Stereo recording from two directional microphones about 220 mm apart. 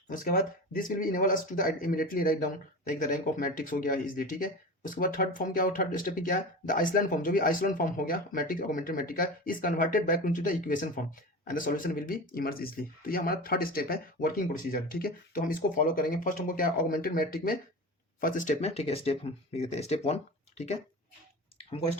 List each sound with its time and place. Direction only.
0.1 s speech: 40° left (ahead or behind)